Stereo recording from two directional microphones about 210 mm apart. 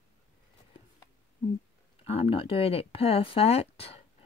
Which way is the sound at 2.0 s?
25° left (ahead or behind).